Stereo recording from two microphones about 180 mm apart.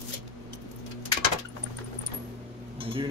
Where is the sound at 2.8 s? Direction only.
30° right (ahead or behind).